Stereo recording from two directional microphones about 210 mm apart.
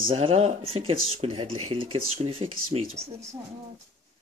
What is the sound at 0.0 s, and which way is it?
Speech, 25° right (ahead or behind).